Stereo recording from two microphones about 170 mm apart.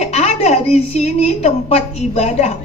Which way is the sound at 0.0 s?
40° left (ahead or behind).